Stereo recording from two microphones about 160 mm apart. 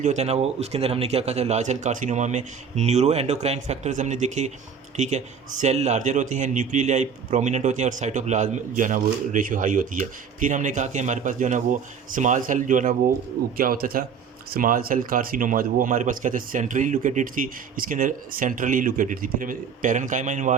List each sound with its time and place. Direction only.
0.0 s a man's voice: 45° right (ahead or behind)
13.6 s speech: 65° right (ahead or behind); by 20.6 s 50° right (ahead or behind)